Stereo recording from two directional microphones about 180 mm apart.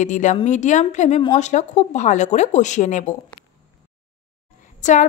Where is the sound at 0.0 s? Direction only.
45° left (ahead or behind).